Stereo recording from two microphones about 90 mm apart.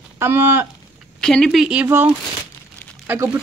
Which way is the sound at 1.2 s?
5° left (ahead or behind).